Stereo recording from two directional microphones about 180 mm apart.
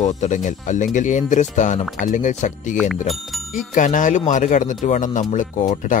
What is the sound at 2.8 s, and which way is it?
Speech, centre (ahead or behind).